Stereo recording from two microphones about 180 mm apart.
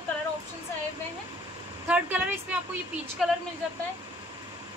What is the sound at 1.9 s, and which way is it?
A woman's voice, 10° right (ahead or behind).